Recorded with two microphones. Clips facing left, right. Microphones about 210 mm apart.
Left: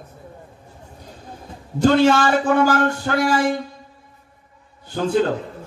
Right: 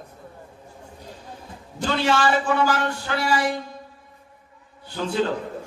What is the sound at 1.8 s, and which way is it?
Speech, 45° left (ahead or behind).